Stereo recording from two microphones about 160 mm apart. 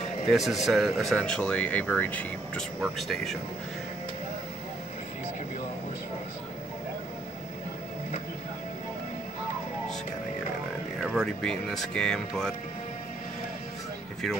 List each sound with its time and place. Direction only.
0.3 s speech: centre (ahead or behind)
11.0 s speech: centre (ahead or behind)